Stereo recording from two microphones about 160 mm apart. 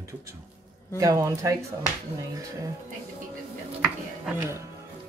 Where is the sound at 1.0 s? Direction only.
20° right (ahead or behind).